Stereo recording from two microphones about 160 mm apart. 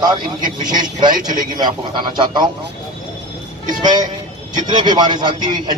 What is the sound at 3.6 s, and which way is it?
Speech, 25° right (ahead or behind).